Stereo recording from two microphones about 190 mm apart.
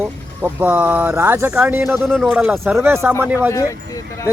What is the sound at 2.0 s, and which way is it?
Speech, centre (ahead or behind).